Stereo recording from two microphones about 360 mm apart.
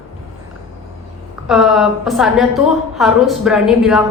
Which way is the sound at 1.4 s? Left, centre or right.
Centre.